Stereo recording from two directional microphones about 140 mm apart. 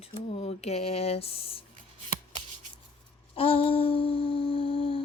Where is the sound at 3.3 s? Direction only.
40° left (ahead or behind).